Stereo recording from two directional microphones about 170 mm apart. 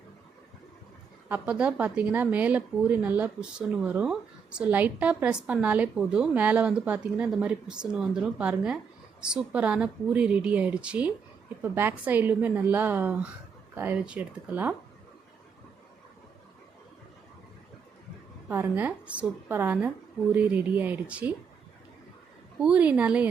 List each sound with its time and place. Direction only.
1.3 s speech: 5° right (ahead or behind)
18.4 s speech: 10° right (ahead or behind)
22.6 s speech: 5° right (ahead or behind)